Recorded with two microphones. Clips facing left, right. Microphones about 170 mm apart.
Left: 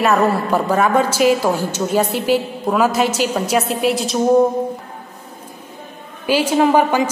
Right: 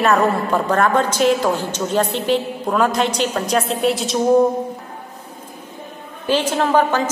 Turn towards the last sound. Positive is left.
turn(degrees=10)  # may be behind; listen again after turning